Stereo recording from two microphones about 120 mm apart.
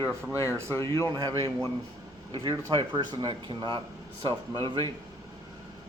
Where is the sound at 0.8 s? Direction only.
25° left (ahead or behind).